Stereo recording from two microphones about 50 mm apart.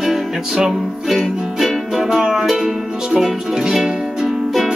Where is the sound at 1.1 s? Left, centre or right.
Centre.